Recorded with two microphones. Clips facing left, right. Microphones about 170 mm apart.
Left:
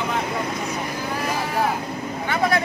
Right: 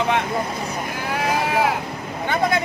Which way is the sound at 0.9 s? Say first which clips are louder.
Right 6 dB; 70° right (ahead or behind).